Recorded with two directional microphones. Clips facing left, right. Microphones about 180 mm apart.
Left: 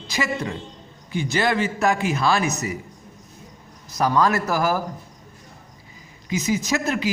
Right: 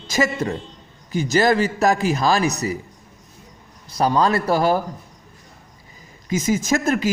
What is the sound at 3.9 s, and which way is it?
Speech, 30° right (ahead or behind).